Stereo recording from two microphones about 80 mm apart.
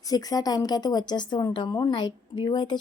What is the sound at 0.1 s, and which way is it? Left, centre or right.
A woman's voice, left.